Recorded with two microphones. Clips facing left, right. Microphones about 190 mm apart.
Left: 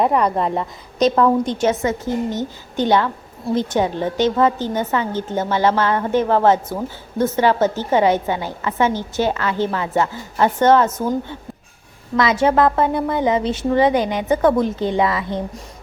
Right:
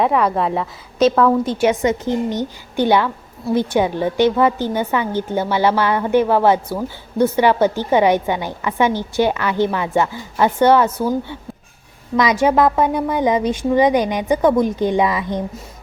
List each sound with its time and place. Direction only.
0.0 s a woman's voice: centre (ahead or behind); by 15.4 s 15° right (ahead or behind)